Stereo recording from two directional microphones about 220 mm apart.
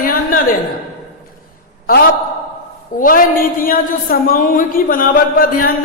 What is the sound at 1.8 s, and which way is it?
A man's voice, 40° left (ahead or behind).